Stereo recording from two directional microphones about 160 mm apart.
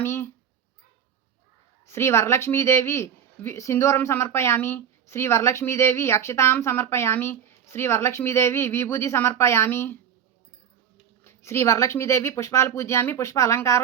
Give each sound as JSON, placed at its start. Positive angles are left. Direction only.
{"t": 0.0, "sound": "a sound", "side_deg": 15}
{"t": 1.9, "sound": "a woman's voice", "side_deg": 15}
{"t": 11.2, "sound": "a woman's voice", "side_deg": 15}